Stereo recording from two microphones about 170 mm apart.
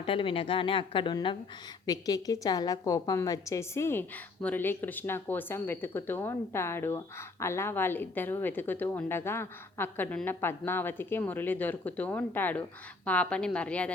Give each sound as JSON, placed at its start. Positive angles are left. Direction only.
{"t": 0.0, "sound": "a woman's voice", "side_deg": 30}